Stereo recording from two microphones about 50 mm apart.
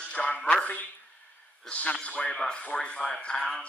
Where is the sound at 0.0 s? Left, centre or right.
Left.